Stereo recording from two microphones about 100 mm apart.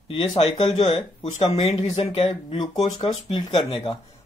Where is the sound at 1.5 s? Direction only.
90° left.